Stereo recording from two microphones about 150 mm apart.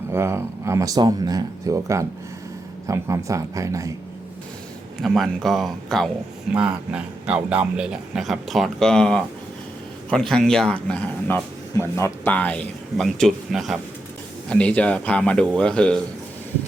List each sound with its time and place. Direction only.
0.1 s speech: 15° right (ahead or behind)
5.0 s a man's voice: centre (ahead or behind)